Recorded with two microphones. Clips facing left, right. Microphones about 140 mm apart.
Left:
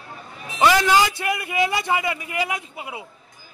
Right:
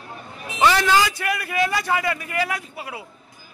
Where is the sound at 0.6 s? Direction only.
15° left (ahead or behind).